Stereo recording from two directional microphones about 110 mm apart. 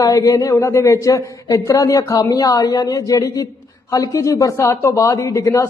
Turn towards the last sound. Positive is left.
turn(degrees=30)  # may be behind; listen again after turning